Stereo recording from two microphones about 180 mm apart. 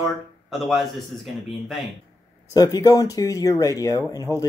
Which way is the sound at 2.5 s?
20° left (ahead or behind).